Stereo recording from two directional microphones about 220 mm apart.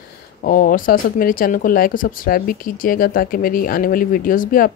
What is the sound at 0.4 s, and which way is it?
Speech, 40° left (ahead or behind).